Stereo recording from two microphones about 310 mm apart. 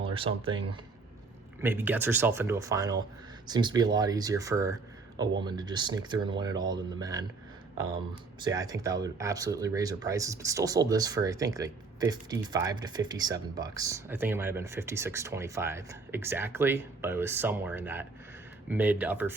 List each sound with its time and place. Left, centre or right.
0.0 s speech: centre
1.6 s speech: centre
8.4 s speech: centre